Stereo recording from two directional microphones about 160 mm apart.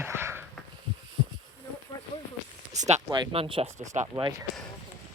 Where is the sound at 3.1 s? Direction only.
30° right (ahead or behind).